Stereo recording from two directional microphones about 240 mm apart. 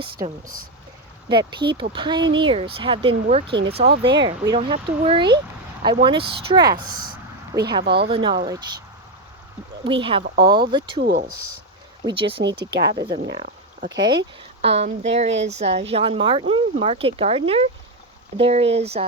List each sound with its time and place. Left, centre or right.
0.4 s speech: right
1.3 s speech: centre
3.9 s speech: right
4.2 s speech: centre
7.9 s speech: right
8.1 s speech: right
9.8 s speech: right
11.0 s speech: right
12.0 s speech: right